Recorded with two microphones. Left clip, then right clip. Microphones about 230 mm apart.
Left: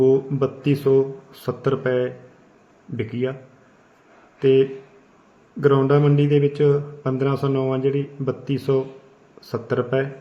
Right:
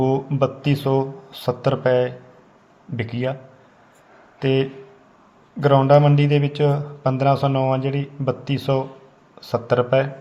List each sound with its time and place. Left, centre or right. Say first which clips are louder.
0.0 s a man's voice: left 2 dB; centre
4.4 s a man's voice: left 4 dB; right